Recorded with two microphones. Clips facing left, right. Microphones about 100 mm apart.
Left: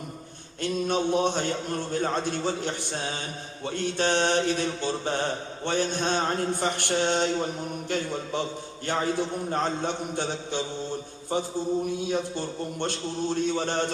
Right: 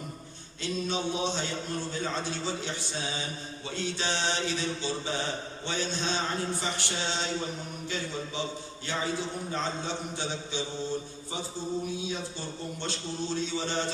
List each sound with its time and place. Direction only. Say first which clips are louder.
0.6 s mantra: left 5 dB; 55° left (ahead or behind)